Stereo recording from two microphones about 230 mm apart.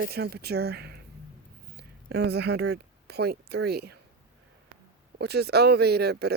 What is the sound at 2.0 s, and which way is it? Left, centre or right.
Speech, right.